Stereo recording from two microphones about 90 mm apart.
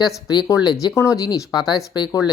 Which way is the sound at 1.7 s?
55° left (ahead or behind).